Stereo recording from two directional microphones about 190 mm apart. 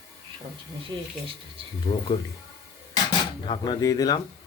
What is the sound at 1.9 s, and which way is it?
Speech, 35° left (ahead or behind).